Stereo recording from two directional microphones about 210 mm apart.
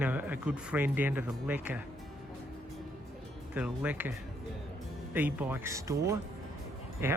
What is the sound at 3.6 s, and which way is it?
Speech, 5° right (ahead or behind).